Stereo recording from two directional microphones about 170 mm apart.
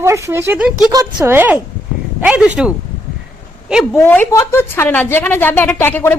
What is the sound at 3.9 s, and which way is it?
A woman's voice, 10° left (ahead or behind).